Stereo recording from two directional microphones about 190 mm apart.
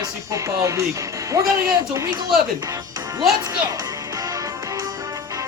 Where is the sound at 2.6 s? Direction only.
15° right (ahead or behind).